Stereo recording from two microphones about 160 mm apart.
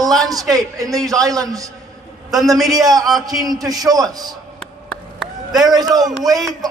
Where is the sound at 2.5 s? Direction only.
Centre (ahead or behind).